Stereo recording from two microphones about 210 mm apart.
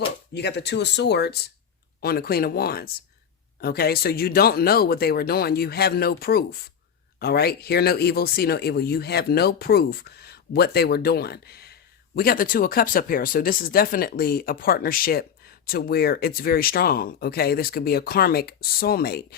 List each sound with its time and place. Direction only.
0.3 s speech: 55° left (ahead or behind)